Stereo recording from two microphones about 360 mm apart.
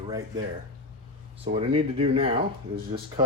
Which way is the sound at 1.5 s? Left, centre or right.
Centre.